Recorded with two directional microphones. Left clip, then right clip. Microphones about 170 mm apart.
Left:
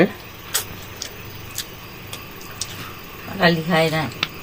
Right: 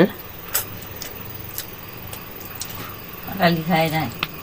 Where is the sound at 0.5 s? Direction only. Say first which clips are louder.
Left 2 dB; 15° right (ahead or behind).